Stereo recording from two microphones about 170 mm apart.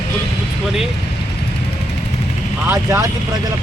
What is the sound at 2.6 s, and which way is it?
Speech, 15° right (ahead or behind).